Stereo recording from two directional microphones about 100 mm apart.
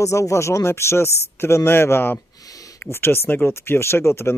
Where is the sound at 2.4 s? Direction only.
35° left (ahead or behind).